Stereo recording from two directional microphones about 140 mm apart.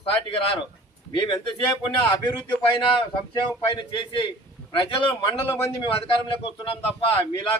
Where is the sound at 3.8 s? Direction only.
35° left (ahead or behind).